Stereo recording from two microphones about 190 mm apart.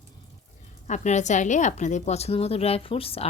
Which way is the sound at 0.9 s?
40° left (ahead or behind).